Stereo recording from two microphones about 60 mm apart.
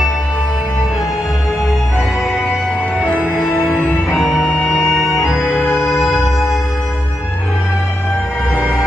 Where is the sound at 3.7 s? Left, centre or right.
Centre.